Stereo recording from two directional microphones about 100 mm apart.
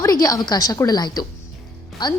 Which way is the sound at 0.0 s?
35° left (ahead or behind).